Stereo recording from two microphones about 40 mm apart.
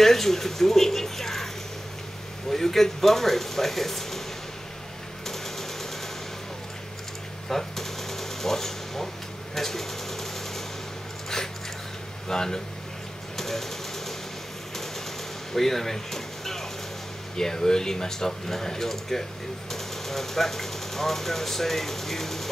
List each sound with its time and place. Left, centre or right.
0.0 s speech: centre
2.5 s speech: centre
5.2 s sewing machine: centre
7.4 s a sound: centre
9.6 s sewing machine: centre
11.3 s dog: centre
12.3 s speech: centre
13.4 s a sound: centre
15.5 s speech: centre